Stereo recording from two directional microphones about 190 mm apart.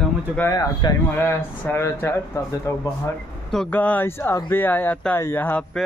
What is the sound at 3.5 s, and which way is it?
Speech, 5° left (ahead or behind).